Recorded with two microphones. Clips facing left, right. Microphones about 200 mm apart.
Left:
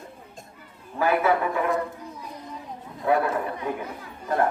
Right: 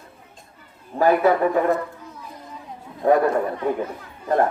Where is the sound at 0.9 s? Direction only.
40° right (ahead or behind).